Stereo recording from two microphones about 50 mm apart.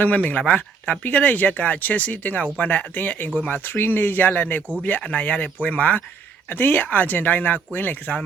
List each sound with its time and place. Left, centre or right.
0.0 s speech: left
6.5 s speech: left